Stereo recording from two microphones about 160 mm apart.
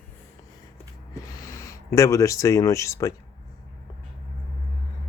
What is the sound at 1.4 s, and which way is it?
Speech, 20° left (ahead or behind).